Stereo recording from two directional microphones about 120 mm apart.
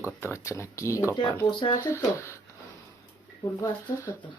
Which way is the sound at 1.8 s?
25° left (ahead or behind).